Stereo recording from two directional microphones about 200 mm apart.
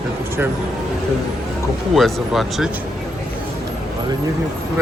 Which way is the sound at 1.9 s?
Centre (ahead or behind).